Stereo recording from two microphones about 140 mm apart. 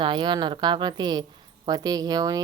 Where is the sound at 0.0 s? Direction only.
35° right (ahead or behind).